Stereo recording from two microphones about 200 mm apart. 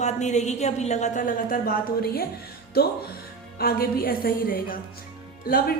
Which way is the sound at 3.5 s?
50° left (ahead or behind).